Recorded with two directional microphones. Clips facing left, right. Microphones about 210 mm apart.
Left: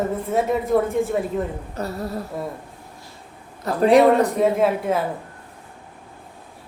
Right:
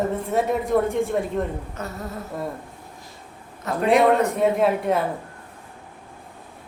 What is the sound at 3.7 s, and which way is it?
Speech, 35° left (ahead or behind).